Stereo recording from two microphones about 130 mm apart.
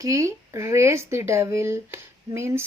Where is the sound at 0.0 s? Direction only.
25° right (ahead or behind).